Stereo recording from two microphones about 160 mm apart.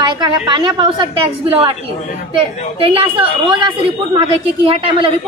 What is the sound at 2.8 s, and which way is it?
A woman's voice, 35° right (ahead or behind).